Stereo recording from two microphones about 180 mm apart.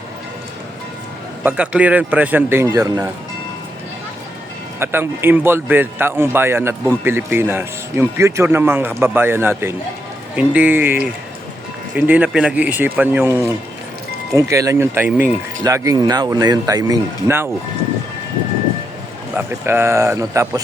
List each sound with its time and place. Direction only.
1.5 s speech: 5° right (ahead or behind)
4.8 s speech: 10° right (ahead or behind)
19.6 s speech: 15° right (ahead or behind)